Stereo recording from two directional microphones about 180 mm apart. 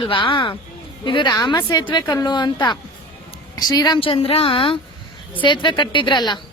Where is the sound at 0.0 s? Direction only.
30° left (ahead or behind).